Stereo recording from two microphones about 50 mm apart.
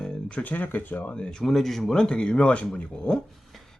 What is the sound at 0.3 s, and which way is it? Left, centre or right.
Speech, left.